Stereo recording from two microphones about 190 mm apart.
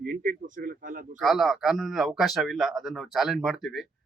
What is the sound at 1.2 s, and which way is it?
Speech, centre (ahead or behind).